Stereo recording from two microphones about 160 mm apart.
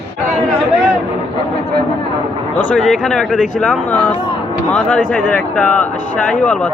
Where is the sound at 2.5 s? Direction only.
10° left (ahead or behind).